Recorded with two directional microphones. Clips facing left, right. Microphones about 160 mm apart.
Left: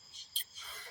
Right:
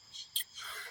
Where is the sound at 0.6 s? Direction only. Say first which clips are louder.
Right 2 dB; 15° left (ahead or behind).